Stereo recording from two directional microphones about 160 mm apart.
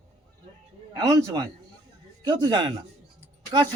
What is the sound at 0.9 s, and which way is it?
A man's voice, 25° right (ahead or behind).